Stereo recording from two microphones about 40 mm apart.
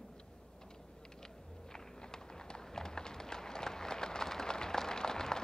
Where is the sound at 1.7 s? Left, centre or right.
Centre.